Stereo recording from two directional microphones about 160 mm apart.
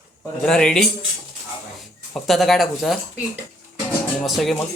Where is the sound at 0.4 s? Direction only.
5° left (ahead or behind).